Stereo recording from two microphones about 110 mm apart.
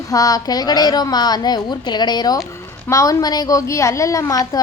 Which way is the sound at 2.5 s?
25° left (ahead or behind).